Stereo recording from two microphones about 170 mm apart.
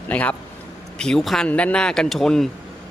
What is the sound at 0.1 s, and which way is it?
Speech, 10° left (ahead or behind).